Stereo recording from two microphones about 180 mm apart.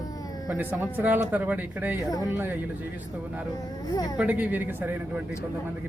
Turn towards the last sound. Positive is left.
turn(degrees=-10)  # may be behind; listen again after turning